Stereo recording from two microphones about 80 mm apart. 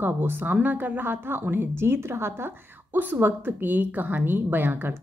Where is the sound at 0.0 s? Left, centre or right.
Right.